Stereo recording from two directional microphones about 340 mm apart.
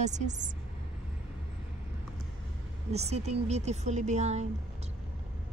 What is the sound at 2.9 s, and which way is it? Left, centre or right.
Speech, centre.